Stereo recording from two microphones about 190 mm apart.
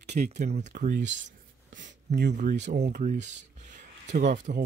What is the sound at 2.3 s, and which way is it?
Speech, 40° right (ahead or behind).